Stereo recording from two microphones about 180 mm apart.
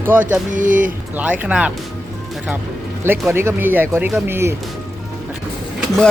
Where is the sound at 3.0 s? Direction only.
15° right (ahead or behind).